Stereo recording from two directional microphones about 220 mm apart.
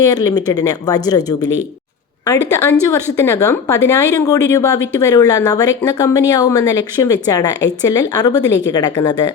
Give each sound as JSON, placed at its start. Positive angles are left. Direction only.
{"t": 0.0, "sound": "speech", "side_deg": 15}